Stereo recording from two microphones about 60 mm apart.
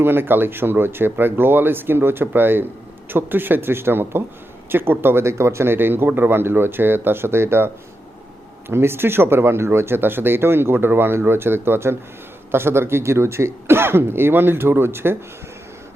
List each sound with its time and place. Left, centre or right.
0.0 s speech: right
8.7 s speech: right